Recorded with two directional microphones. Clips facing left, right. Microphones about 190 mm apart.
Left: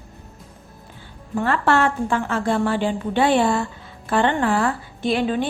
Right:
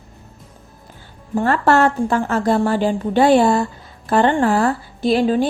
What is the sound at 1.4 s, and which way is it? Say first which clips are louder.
A woman's voice: right 4 dB; 40° right (ahead or behind).